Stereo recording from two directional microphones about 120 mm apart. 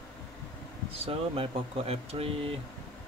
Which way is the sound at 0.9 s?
50° right (ahead or behind).